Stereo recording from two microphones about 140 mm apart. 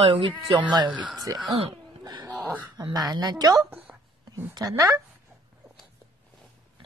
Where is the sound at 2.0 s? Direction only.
30° right (ahead or behind).